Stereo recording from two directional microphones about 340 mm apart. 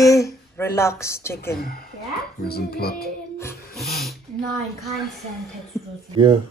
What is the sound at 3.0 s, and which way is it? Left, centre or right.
Speech, centre.